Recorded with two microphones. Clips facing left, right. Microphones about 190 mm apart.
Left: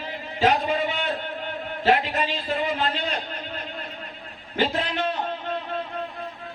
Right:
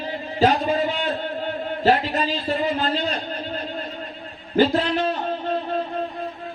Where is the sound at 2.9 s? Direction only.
35° right (ahead or behind).